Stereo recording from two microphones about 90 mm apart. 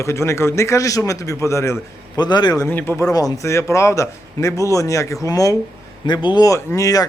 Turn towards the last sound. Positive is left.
turn(degrees=40)  # may be behind; listen again after turning